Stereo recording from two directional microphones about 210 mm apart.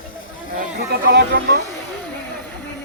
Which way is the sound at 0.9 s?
55° right (ahead or behind).